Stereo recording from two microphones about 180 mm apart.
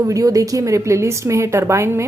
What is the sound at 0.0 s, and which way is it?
Speech, 20° right (ahead or behind).